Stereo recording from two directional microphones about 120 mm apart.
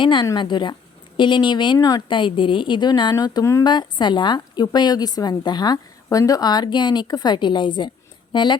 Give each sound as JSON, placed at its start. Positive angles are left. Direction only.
{"t": 0.0, "sound": "a woman's voice", "side_deg": 45}